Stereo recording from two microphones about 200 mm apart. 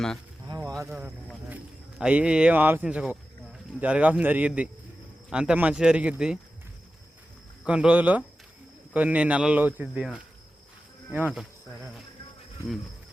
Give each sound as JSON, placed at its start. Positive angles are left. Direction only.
{"t": 0.4, "sound": "a sound", "side_deg": -20}
{"t": 0.9, "sound": "boat", "side_deg": -5}
{"t": 2.0, "sound": "speech", "side_deg": -5}
{"t": 7.6, "sound": "speech", "side_deg": -5}